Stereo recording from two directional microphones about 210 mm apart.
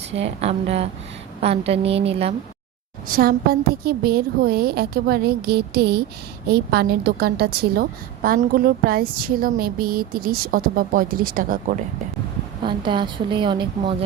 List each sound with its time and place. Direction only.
0.1 s a woman's voice: 30° right (ahead or behind)
3.1 s a woman's voice: 45° right (ahead or behind)
12.6 s a woman's voice: 25° right (ahead or behind)